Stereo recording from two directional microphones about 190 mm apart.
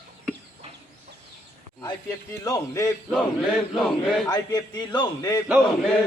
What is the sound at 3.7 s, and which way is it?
Speech, centre (ahead or behind).